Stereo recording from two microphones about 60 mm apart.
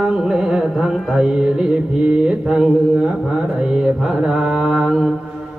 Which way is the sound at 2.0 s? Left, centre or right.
Centre.